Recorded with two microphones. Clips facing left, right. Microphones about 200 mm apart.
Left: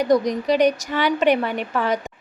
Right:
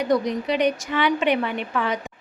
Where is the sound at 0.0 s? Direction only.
40° left (ahead or behind).